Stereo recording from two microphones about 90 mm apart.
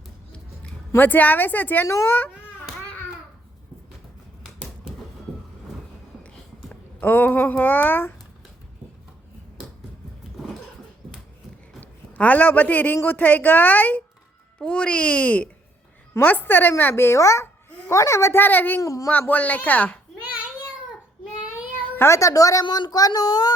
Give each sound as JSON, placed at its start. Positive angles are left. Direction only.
{"t": 0.9, "sound": "a woman's voice", "side_deg": 20}
{"t": 7.0, "sound": "a woman's voice", "side_deg": 20}
{"t": 11.8, "sound": "a woman's voice", "side_deg": 15}
{"t": 18.8, "sound": "a woman's voice", "side_deg": 35}
{"t": 19.3, "sound": "speech", "side_deg": 20}
{"t": 21.8, "sound": "cat", "side_deg": 15}
{"t": 22.0, "sound": "a woman's voice", "side_deg": 35}
{"t": 22.6, "sound": "speech", "side_deg": 55}